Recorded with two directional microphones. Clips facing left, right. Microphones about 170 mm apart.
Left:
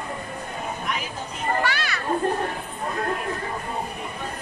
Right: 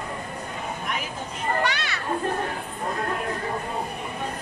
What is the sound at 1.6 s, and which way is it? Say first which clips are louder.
Children playing: left 1 dB; 20° right (ahead or behind).